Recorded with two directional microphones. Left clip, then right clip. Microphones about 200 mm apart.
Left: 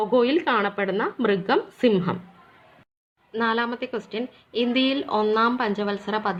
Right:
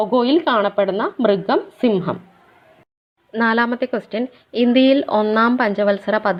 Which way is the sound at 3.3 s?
25° right (ahead or behind).